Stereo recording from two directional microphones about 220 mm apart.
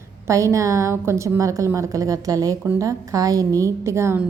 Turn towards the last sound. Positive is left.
turn(degrees=-10)  # may be behind; listen again after turning